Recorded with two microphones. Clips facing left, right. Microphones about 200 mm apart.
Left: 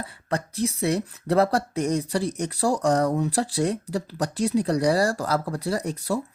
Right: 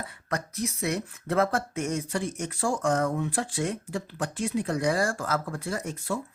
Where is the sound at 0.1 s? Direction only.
30° left (ahead or behind).